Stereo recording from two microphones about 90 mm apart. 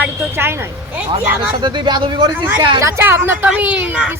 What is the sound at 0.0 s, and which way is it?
Speech, 25° right (ahead or behind).